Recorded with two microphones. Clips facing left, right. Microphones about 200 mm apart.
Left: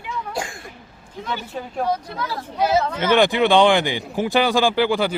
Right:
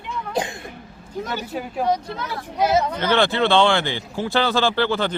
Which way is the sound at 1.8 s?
20° right (ahead or behind).